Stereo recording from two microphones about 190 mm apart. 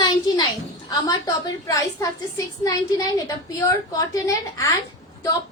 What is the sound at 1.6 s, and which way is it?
A woman's voice, 15° left (ahead or behind).